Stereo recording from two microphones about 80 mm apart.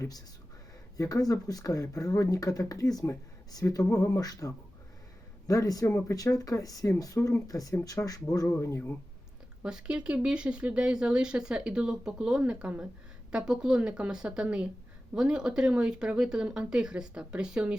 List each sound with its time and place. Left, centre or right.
0.9 s speech: left
8.0 s speech: left
9.6 s speech: centre